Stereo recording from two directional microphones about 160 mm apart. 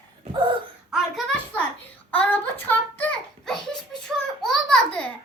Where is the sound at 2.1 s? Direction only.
10° left (ahead or behind).